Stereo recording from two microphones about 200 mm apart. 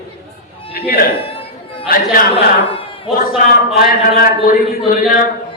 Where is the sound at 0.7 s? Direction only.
50° left (ahead or behind).